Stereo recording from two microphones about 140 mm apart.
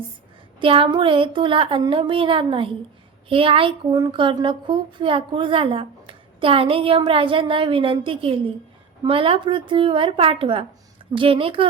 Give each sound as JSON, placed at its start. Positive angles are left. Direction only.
{"t": 0.6, "sound": "a woman's voice", "side_deg": -40}